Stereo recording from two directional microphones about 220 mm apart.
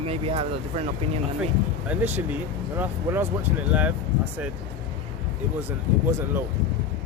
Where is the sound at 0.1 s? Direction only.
25° right (ahead or behind).